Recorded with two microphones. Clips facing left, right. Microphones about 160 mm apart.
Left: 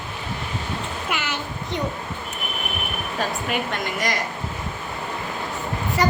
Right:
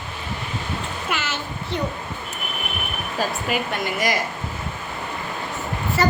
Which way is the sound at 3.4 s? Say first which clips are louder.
Right 1 dB; 5° right (ahead or behind).